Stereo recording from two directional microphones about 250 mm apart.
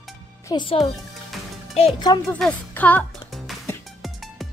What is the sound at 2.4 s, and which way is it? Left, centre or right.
Music, centre.